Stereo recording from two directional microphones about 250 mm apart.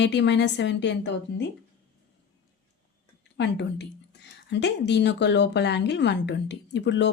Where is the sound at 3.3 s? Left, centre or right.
Left.